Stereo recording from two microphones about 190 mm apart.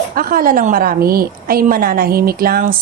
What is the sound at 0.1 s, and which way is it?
A woman's voice, 50° right (ahead or behind).